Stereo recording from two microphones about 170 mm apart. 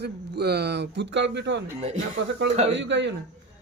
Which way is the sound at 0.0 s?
70° right (ahead or behind).